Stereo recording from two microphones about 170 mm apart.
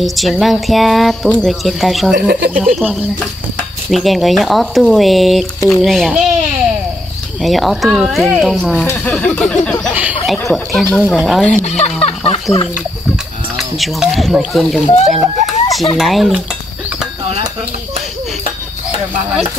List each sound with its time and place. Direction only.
0.0 s speech: centre (ahead or behind)
2.1 s speech: 65° right (ahead or behind)
2.8 s speech: 5° right (ahead or behind)
7.4 s speech: centre (ahead or behind)
9.9 s a sound: 10° right (ahead or behind)
10.5 s speech: centre (ahead or behind)
11.6 s a sound: 40° left (ahead or behind)
13.1 s speech: centre (ahead or behind)
15.0 s a sound: centre (ahead or behind)
16.0 s speech: centre (ahead or behind)